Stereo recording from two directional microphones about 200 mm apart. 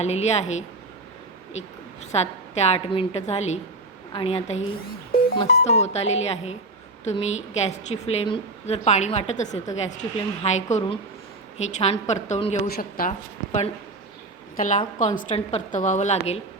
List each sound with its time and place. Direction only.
0.0 s a woman's voice: 35° left (ahead or behind)
2.1 s a woman's voice: 35° left (ahead or behind)
12.6 s a woman's voice: 45° left (ahead or behind)